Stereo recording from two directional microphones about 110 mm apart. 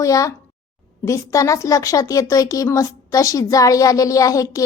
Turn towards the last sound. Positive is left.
turn(degrees=30)  # may be behind; listen again after turning